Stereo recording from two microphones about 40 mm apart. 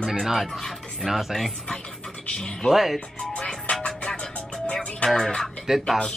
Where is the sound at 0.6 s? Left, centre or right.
Centre.